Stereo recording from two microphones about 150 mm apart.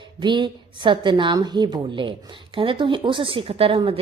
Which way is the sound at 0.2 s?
30° right (ahead or behind).